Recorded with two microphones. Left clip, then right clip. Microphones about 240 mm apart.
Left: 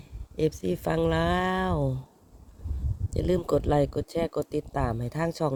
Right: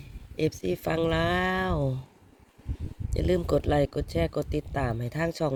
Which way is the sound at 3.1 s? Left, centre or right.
Centre.